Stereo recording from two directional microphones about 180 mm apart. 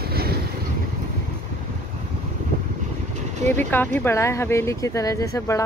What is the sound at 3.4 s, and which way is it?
Speech, 10° left (ahead or behind).